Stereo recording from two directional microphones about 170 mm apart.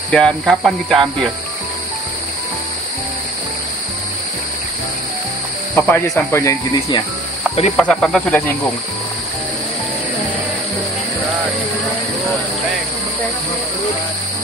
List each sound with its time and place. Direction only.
0.1 s speech: 5° left (ahead or behind)
5.8 s speech: 10° left (ahead or behind)
7.7 s speech: 5° left (ahead or behind)